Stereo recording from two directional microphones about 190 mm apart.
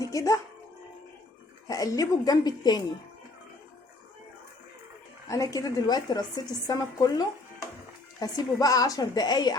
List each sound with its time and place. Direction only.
0.0 s speech: 15° left (ahead or behind)
1.6 s a woman's voice: 20° left (ahead or behind)
5.3 s a woman's voice: 15° left (ahead or behind)
8.2 s a woman's voice: 20° left (ahead or behind)